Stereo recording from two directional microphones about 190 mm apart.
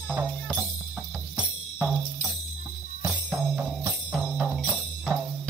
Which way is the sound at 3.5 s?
5° right (ahead or behind).